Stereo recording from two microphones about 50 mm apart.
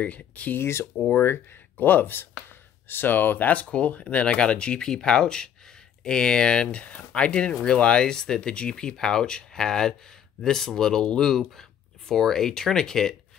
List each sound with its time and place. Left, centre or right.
0.0 s speech: left
0.6 s speech: left
1.9 s speech: left; by 13.1 s centre